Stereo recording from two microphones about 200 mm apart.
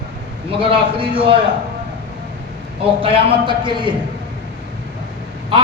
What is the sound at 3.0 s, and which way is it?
Speech, 25° right (ahead or behind).